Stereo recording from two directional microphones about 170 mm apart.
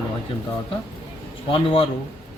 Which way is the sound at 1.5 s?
35° left (ahead or behind).